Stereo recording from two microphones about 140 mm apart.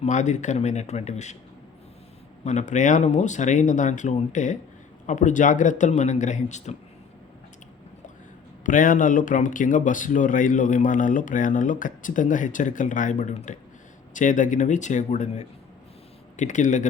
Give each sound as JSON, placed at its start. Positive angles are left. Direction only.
{"t": 0.0, "sound": "speech", "side_deg": 60}
{"t": 2.4, "sound": "speech", "side_deg": 60}
{"t": 8.6, "sound": "speech", "side_deg": 75}